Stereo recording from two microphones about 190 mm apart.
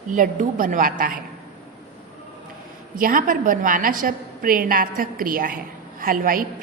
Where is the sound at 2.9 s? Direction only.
45° right (ahead or behind).